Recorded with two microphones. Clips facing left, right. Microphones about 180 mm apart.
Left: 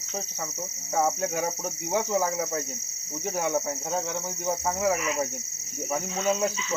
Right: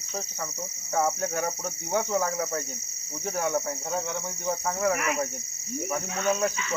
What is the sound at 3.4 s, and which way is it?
Cricket, 20° left (ahead or behind).